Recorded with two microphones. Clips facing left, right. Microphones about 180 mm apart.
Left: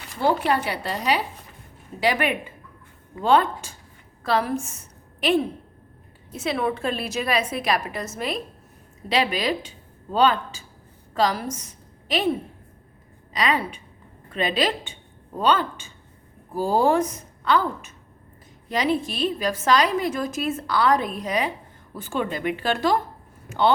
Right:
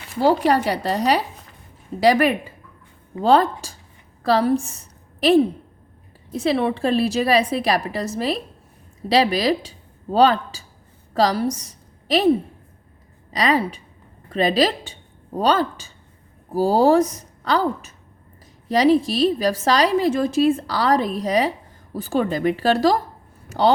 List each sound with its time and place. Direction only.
0.2 s a woman's voice: 40° right (ahead or behind)
13.3 s a woman's voice: 35° right (ahead or behind)